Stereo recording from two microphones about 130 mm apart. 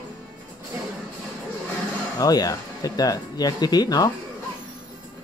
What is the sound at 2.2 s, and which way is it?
Speech, 30° left (ahead or behind).